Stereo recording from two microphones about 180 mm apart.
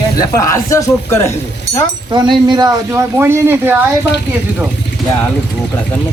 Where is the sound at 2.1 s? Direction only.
25° right (ahead or behind).